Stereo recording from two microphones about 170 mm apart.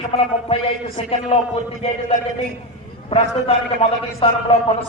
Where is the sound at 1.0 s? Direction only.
35° left (ahead or behind).